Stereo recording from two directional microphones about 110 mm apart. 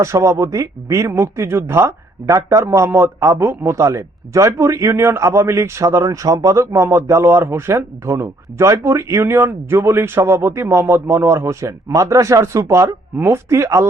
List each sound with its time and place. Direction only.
0.0 s speech: 25° right (ahead or behind)